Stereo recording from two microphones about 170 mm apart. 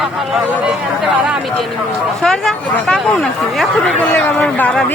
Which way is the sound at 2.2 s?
Centre (ahead or behind).